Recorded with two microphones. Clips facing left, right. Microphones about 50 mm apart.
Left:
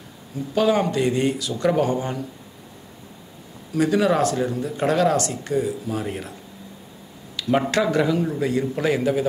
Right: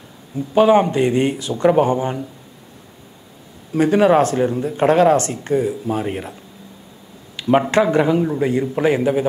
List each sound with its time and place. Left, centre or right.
0.6 s speech: right
3.7 s speech: right
7.3 s a sound: right
7.7 s speech: right